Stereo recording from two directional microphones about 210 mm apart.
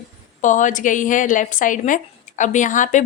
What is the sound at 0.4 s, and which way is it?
A woman's voice, 35° left (ahead or behind).